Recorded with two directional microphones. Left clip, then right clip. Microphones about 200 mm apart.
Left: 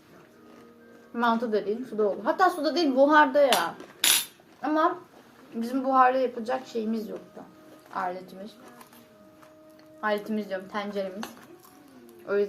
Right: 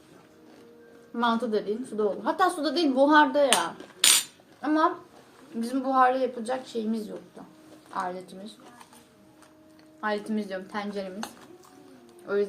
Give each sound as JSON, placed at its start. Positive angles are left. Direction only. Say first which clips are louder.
{"t": 1.1, "sound": "a woman's voice", "louder": "left 1 dB", "side_deg": -20}
{"t": 10.0, "sound": "a woman's voice", "louder": "left 1 dB", "side_deg": -20}
{"t": 12.2, "sound": "speech", "louder": "left 1 dB", "side_deg": -20}